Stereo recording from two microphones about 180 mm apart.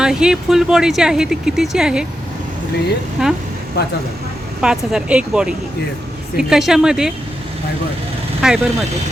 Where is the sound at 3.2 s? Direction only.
5° right (ahead or behind).